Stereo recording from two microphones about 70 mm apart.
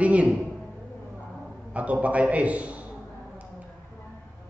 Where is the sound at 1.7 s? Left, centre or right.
Centre.